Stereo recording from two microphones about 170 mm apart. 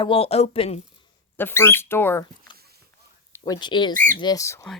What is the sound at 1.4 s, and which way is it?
Speech, 15° left (ahead or behind).